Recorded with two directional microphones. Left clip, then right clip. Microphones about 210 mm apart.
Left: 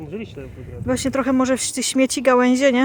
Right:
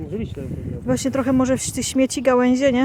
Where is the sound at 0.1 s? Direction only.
55° right (ahead or behind).